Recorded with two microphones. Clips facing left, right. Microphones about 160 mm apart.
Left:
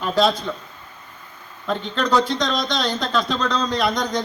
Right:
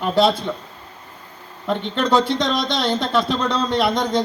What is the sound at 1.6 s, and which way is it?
A man's voice, 20° right (ahead or behind).